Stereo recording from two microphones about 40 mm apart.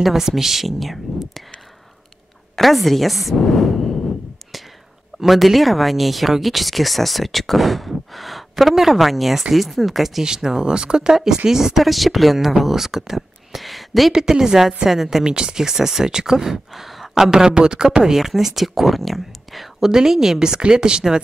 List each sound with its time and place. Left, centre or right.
0.0 s speech: centre
2.5 s a woman's voice: centre
5.2 s speech: centre
10.2 s speech: centre
14.1 s speech: centre
15.2 s speech: right
18.1 s speech: centre
19.8 s speech: centre